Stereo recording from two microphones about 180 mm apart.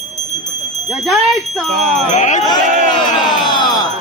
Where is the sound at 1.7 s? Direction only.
45° right (ahead or behind).